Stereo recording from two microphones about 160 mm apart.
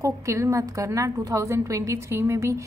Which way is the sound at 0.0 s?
20° right (ahead or behind).